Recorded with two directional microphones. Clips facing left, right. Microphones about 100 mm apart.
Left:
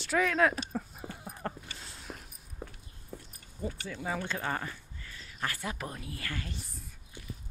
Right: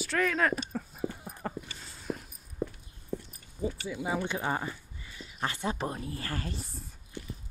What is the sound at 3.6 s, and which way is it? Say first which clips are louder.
Speech: right 3 dB; 10° right (ahead or behind).